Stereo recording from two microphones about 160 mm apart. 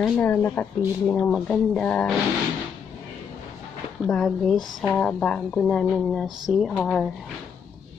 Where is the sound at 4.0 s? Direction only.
Centre (ahead or behind).